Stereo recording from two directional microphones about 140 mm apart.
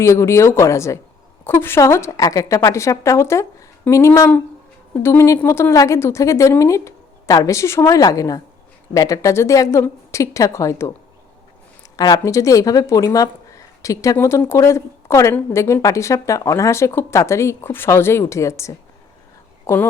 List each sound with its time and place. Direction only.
0.0 s speech: 20° left (ahead or behind)
11.9 s speech: 25° left (ahead or behind)